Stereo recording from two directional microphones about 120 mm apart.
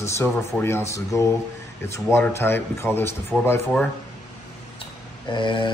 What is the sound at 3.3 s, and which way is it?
Speech, 5° left (ahead or behind).